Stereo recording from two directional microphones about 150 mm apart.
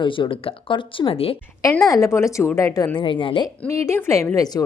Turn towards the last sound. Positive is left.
turn(degrees=20)  # may be behind; listen again after turning